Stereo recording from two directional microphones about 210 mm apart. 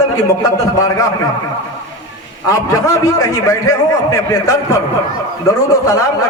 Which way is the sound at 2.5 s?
15° left (ahead or behind).